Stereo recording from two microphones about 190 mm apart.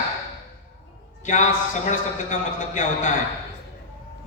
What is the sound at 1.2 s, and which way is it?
A man's voice, 40° left (ahead or behind).